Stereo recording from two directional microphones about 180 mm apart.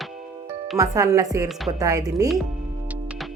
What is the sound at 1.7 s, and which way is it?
Speech, 20° right (ahead or behind).